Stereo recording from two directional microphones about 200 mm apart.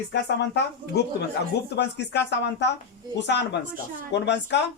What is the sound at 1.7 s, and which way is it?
Speech, 60° left (ahead or behind).